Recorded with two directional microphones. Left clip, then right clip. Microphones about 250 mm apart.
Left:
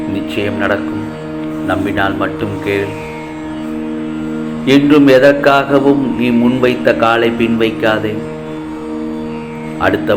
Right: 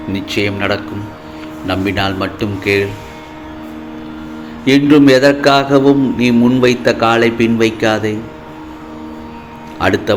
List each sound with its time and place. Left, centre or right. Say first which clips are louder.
0.1 s mantra: right 3 dB; right
4.6 s mantra: even; right
9.8 s mantra: left 1 dB; right